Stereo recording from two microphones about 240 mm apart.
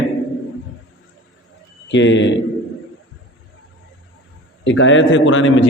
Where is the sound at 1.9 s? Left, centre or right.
Left.